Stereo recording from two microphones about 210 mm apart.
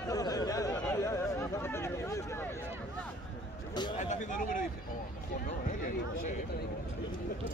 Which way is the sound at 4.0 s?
35° left (ahead or behind).